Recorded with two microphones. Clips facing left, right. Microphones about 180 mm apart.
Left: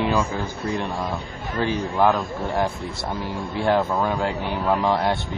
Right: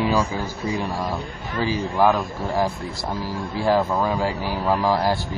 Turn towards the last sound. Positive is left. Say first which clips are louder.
# right 1 dB
turn(degrees=0)  # may be behind; listen again after turning